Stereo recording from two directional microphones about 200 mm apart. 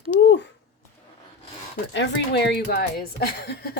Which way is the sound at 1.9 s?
60° left (ahead or behind).